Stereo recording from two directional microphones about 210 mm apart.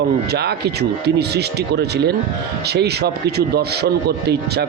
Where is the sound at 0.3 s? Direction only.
50° right (ahead or behind).